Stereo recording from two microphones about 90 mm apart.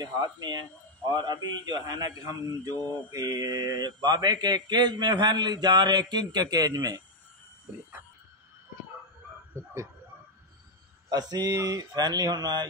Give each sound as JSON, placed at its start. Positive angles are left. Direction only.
{"t": 0.0, "sound": "a man's voice", "side_deg": -55}
{"t": 9.5, "sound": "a sound", "side_deg": -35}
{"t": 11.1, "sound": "a man's voice", "side_deg": -45}